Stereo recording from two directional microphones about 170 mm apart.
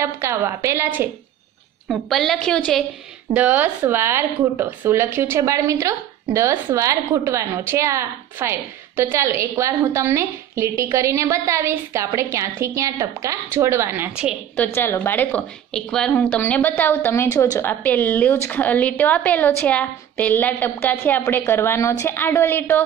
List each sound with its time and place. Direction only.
0.0 s speech: 15° right (ahead or behind)
1.9 s a woman's voice: centre (ahead or behind)
3.3 s speech: 10° right (ahead or behind)
14.6 s a woman's voice: 15° left (ahead or behind)